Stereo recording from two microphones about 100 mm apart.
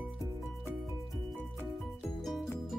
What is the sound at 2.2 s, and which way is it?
Music, centre (ahead or behind).